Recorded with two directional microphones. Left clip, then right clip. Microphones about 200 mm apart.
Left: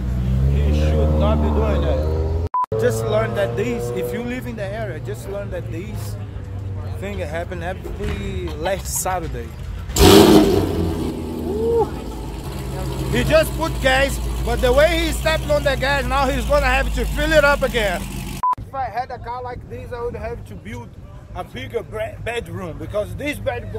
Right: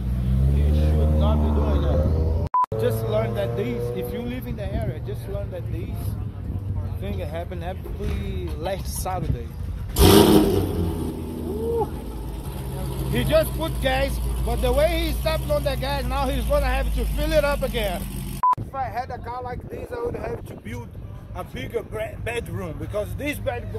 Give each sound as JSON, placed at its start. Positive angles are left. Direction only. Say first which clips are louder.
{"t": 0.6, "sound": "vehicle", "louder": "left 7 dB", "side_deg": 5}
{"t": 2.5, "sound": "speech", "louder": "left 2 dB", "side_deg": 0}
{"t": 7.0, "sound": "speech", "louder": "left 6 dB", "side_deg": 5}
{"t": 9.9, "sound": "roaring cats", "louder": "left 5 dB", "side_deg": 20}
{"t": 13.1, "sound": "speech", "louder": "left 4 dB", "side_deg": 0}
{"t": 18.8, "sound": "speech", "louder": "left 3 dB", "side_deg": -40}
{"t": 21.4, "sound": "speech", "louder": "left 3 dB", "side_deg": -25}